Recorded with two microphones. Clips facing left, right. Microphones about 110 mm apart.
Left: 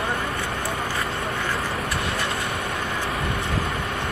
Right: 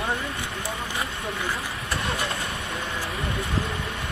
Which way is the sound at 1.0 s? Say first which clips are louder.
Left 3 dB; 70° left (ahead or behind).